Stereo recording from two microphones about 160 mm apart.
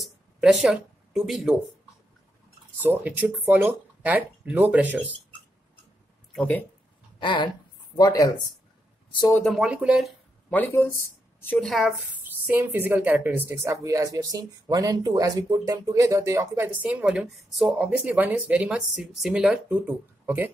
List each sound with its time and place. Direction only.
0.0 s a sound: centre (ahead or behind)
2.8 s a woman's voice: 10° right (ahead or behind)
6.3 s speech: 10° left (ahead or behind)
7.2 s speech: 30° left (ahead or behind)
9.4 s speech: centre (ahead or behind)
10.5 s speech: 10° left (ahead or behind)
12.4 s a woman's voice: 15° right (ahead or behind)